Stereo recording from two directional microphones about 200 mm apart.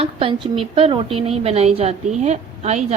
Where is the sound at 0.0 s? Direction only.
25° right (ahead or behind).